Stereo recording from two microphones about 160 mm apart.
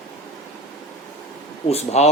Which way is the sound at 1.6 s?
40° left (ahead or behind).